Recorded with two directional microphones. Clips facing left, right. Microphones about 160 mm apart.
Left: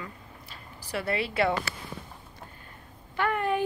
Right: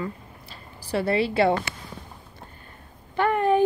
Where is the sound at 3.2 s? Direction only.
30° right (ahead or behind).